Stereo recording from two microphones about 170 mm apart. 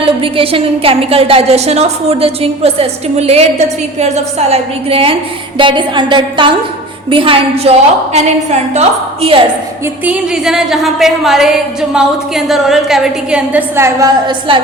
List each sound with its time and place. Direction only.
0.0 s a woman's voice: 35° right (ahead or behind)
9.8 s a woman's voice: 10° right (ahead or behind)
14.3 s a woman's voice: 30° right (ahead or behind)